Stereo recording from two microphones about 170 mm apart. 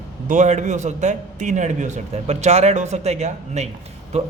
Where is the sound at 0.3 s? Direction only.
45° right (ahead or behind).